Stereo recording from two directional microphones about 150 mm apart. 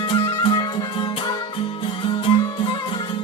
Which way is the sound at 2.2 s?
35° left (ahead or behind).